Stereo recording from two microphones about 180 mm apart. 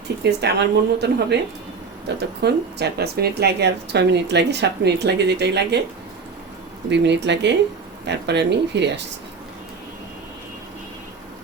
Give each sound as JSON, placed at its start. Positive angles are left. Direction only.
{"t": 0.2, "sound": "speech", "side_deg": -70}
{"t": 6.9, "sound": "speech", "side_deg": -75}